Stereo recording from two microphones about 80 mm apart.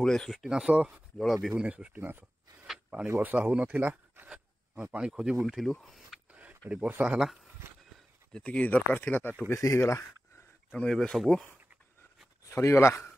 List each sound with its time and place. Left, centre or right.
0.0 s speech: centre
0.5 s speech: centre
1.2 s speech: centre
1.6 s speech: centre
5.7 s speech: centre
6.9 s speech: right
8.3 s speech: centre
9.5 s speech: left
10.7 s speech: centre
12.4 s speech: left